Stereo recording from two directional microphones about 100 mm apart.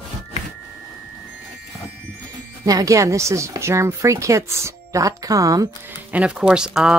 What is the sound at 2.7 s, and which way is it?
Speech, 35° right (ahead or behind).